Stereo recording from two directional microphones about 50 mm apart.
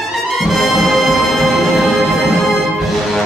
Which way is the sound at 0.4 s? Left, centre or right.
Centre.